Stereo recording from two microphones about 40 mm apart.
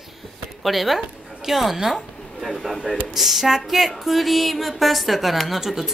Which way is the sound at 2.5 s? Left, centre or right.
Centre.